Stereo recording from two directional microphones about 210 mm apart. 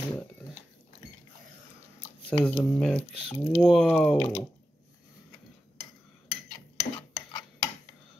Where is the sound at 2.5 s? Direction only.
5° left (ahead or behind).